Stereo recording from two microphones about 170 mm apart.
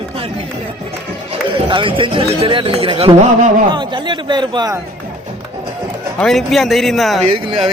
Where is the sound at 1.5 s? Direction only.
30° right (ahead or behind).